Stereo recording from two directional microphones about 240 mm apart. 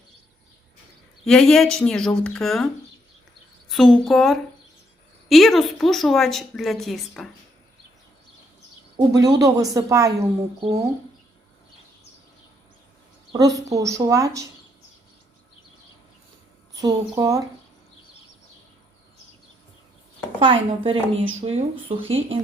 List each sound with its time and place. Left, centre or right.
1.2 s a woman's voice: centre
3.7 s a woman's voice: centre
9.1 s a woman's voice: centre
13.3 s a woman's voice: centre
16.8 s a woman's voice: centre
20.4 s a woman's voice: right